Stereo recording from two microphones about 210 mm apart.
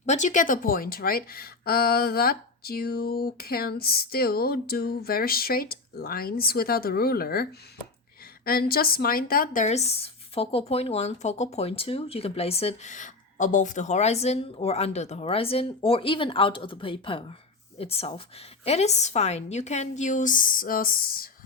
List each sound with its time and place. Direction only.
0.0 s speech: 35° left (ahead or behind)
8.4 s a woman's voice: 45° left (ahead or behind)